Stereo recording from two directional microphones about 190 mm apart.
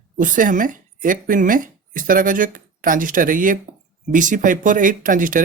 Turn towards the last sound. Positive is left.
turn(degrees=-45)  # may be behind; listen again after turning